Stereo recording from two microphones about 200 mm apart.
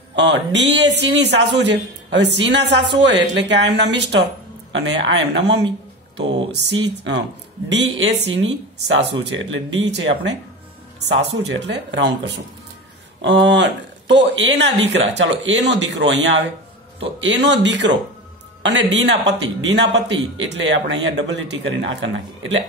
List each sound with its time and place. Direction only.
0.1 s speech: 60° right (ahead or behind)